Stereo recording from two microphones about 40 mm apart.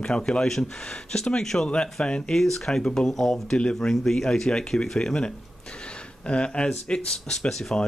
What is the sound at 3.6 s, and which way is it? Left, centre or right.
Speech, left.